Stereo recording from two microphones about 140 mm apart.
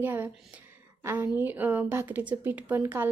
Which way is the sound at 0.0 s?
15° right (ahead or behind).